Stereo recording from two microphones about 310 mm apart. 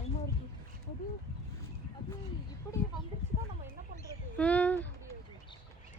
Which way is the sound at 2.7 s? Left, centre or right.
Centre.